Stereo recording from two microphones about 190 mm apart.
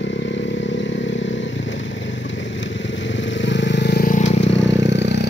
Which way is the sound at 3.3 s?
70° left (ahead or behind).